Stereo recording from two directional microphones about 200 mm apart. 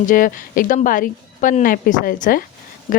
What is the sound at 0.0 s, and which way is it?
A woman's voice, 40° left (ahead or behind).